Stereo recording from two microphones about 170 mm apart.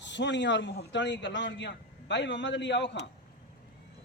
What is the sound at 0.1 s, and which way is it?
A man's voice, 90° left.